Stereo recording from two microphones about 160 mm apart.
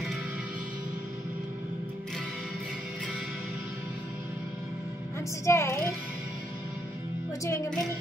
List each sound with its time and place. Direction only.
5.4 s speech: 20° left (ahead or behind)
7.4 s speech: 20° left (ahead or behind)